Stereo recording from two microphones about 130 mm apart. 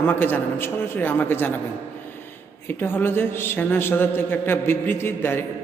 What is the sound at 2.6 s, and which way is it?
A man's voice, 15° left (ahead or behind).